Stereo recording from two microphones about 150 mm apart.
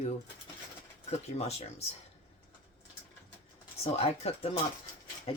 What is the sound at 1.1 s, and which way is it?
Speech, 45° left (ahead or behind).